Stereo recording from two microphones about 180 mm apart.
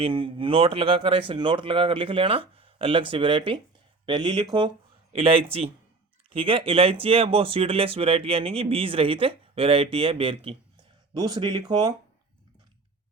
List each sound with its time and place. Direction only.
0.0 s speech: 30° right (ahead or behind)